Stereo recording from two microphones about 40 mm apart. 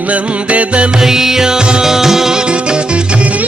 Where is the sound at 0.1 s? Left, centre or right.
Right.